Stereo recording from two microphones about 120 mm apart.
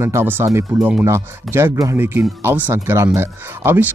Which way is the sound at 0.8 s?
10° right (ahead or behind).